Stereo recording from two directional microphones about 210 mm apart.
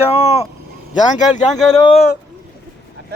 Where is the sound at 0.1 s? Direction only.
30° left (ahead or behind).